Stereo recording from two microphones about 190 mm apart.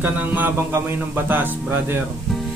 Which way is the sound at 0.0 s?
10° right (ahead or behind).